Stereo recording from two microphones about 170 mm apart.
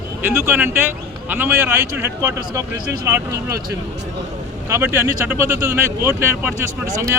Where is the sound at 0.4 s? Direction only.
15° right (ahead or behind).